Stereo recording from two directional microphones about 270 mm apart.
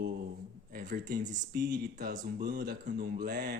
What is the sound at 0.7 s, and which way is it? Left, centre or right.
Speech, right.